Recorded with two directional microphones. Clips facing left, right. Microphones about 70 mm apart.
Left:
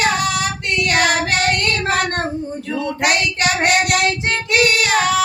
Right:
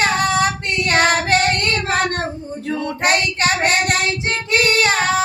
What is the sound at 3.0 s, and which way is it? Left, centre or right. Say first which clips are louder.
Child singing: right 1 dB; right.